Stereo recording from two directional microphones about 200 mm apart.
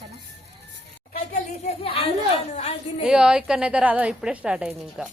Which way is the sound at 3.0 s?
5° right (ahead or behind).